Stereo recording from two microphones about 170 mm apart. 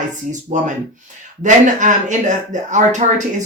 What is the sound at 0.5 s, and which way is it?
Speech, 45° right (ahead or behind).